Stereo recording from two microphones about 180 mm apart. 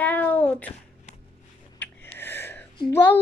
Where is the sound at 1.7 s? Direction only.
10° left (ahead or behind).